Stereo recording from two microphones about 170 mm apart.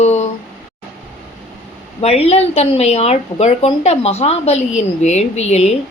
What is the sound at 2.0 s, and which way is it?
A woman's voice, 35° left (ahead or behind).